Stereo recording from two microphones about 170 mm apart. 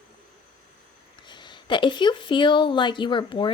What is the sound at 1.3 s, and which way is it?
Speech, 25° left (ahead or behind).